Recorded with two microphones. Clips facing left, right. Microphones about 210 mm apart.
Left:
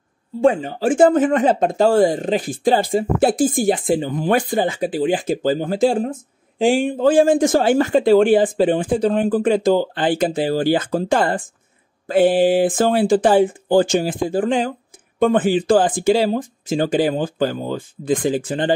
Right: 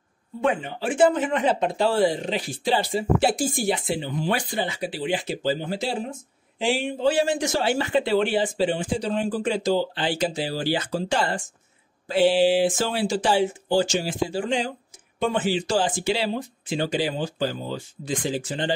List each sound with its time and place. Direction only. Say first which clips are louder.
0.4 s speech: left 8 dB; 35° left (ahead or behind); by 18.7 s 55° left (ahead or behind)